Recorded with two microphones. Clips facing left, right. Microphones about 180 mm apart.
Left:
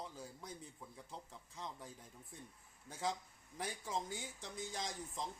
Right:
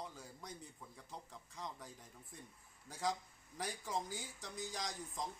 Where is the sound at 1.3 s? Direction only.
Centre (ahead or behind).